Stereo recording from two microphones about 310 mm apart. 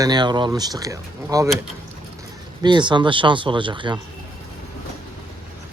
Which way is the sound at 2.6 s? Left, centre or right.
Centre.